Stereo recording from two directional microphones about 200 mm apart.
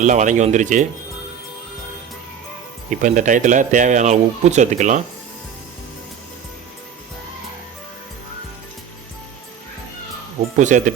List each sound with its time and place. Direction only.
0.0 s speech: 40° right (ahead or behind)
3.0 s speech: 40° right (ahead or behind)
10.6 s speech: 40° right (ahead or behind)